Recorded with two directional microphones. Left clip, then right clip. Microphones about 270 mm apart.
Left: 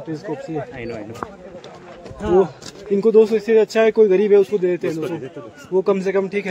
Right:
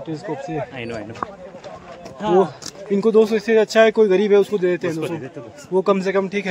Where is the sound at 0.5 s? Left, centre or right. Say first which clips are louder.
Right 1 dB; right.